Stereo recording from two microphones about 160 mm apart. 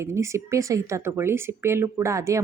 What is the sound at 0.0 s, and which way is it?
Speech, 20° right (ahead or behind).